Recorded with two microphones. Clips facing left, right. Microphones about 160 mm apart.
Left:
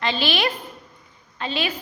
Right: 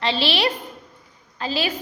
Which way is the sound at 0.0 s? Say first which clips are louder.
Right 1 dB; 30° right (ahead or behind).